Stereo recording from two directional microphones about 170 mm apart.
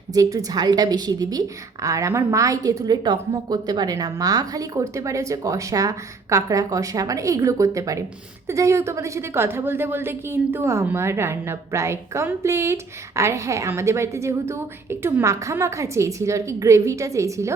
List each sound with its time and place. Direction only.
0.1 s a woman's voice: 20° right (ahead or behind)